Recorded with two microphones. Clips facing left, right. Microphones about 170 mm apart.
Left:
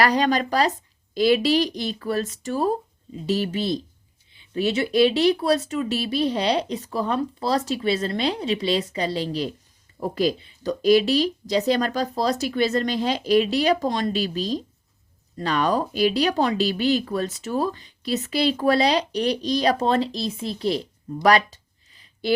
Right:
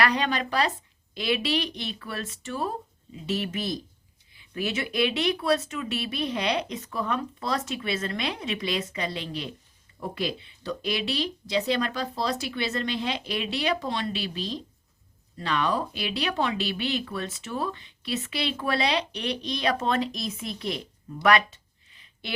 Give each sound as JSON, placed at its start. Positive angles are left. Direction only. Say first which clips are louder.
{"t": 0.0, "sound": "speech", "louder": "left 5 dB", "side_deg": 40}